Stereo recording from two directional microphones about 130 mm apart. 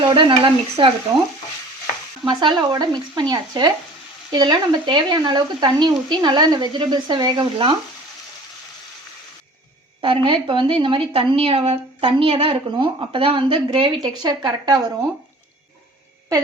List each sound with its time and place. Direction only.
0.0 s speech: 35° right (ahead or behind)
2.2 s speech: 35° right (ahead or behind)
10.0 s speech: 40° right (ahead or behind)